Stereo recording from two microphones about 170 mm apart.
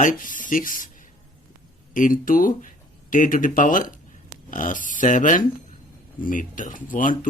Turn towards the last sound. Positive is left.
turn(degrees=50)  # may be behind; listen again after turning